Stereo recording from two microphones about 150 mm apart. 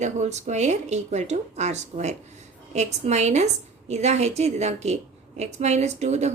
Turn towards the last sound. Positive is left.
turn(degrees=-50)  # may be behind; listen again after turning